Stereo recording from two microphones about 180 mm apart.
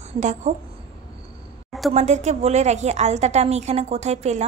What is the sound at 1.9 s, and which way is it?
A woman's voice, 40° right (ahead or behind).